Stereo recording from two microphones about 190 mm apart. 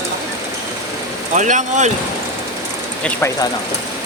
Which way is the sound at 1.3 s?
40° right (ahead or behind).